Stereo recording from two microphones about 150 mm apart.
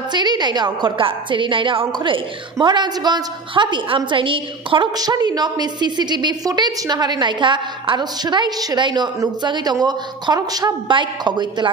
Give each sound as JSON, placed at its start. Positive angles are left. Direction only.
{"t": 0.1, "sound": "a woman's voice", "side_deg": -30}